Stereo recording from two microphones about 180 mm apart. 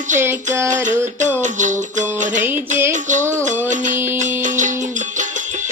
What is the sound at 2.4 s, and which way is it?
Music, 10° right (ahead or behind).